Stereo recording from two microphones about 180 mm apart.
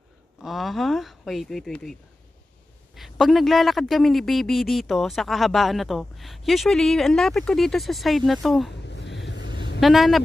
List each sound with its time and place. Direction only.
0.4 s a man's voice: centre (ahead or behind)
8.8 s a sound: 75° left (ahead or behind)
9.8 s a man's voice: centre (ahead or behind)